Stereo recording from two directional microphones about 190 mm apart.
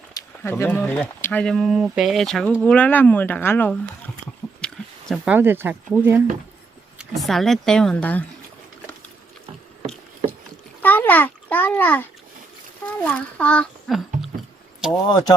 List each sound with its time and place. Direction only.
0.1 s speech: 15° left (ahead or behind); by 6.2 s 10° right (ahead or behind)
7.2 s speech: centre (ahead or behind)
10.8 s a sound: 10° left (ahead or behind)
13.1 s a child's voice: 5° left (ahead or behind)
15.0 s speech: 20° left (ahead or behind)